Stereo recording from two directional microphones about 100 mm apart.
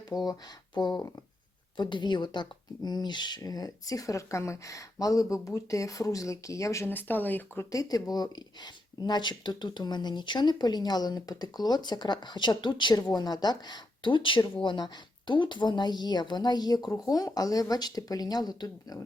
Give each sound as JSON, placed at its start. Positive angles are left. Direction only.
{"t": 0.1, "sound": "speech", "side_deg": 45}
{"t": 7.7, "sound": "speech", "side_deg": 35}